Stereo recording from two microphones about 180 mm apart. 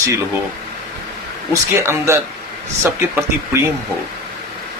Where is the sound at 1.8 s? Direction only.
15° right (ahead or behind).